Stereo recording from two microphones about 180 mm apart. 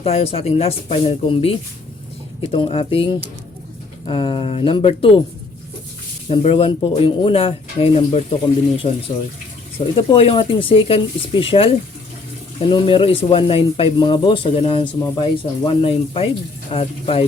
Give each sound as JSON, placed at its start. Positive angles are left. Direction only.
{"t": 0.0, "sound": "speech", "side_deg": 35}
{"t": 6.2, "sound": "speech", "side_deg": 35}